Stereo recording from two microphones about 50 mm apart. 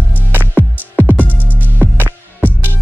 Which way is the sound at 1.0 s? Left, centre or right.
Right.